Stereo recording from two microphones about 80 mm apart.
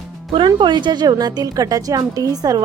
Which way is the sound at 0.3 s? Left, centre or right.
Right.